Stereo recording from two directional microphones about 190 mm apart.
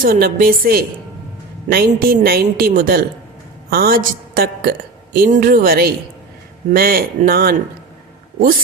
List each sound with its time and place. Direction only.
0.0 s a woman's voice: 50° right (ahead or behind)